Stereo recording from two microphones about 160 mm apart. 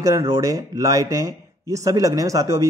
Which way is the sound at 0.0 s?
20° right (ahead or behind).